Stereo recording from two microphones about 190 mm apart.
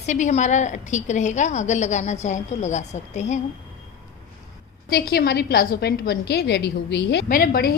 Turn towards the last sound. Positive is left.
turn(degrees=55)  # may be behind; listen again after turning